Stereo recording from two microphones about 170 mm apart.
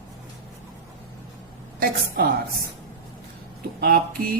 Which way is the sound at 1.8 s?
60° right (ahead or behind).